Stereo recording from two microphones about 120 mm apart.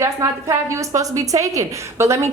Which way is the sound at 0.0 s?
25° right (ahead or behind).